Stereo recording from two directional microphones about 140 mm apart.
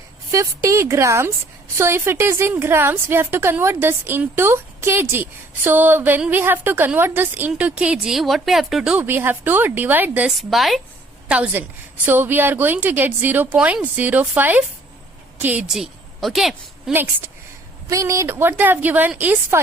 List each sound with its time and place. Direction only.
0.3 s a woman's voice: 20° right (ahead or behind)
10.3 s a woman's voice: centre (ahead or behind)
16.9 s a woman's voice: 15° right (ahead or behind)